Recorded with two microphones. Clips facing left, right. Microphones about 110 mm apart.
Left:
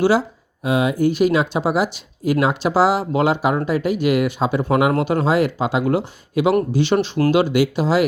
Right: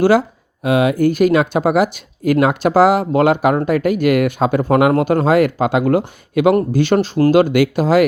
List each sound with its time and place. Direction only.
0.0 s speech: 50° right (ahead or behind)